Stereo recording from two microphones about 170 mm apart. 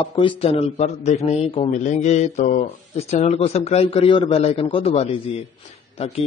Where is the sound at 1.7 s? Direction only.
45° left (ahead or behind).